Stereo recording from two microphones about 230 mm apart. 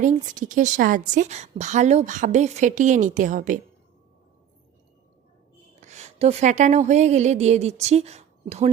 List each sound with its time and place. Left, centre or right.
0.0 s a woman's voice: right
5.8 s speech: right